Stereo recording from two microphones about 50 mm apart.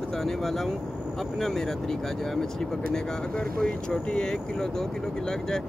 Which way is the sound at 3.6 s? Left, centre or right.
Centre.